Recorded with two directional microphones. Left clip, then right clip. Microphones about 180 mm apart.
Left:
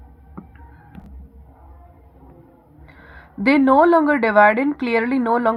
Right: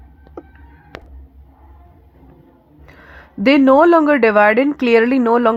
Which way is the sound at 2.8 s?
40° right (ahead or behind).